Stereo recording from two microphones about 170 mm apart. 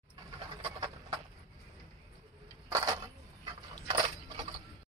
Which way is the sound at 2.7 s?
25° right (ahead or behind).